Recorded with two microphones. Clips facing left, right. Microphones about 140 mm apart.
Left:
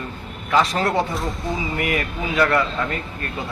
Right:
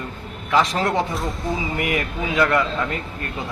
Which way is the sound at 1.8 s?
15° right (ahead or behind).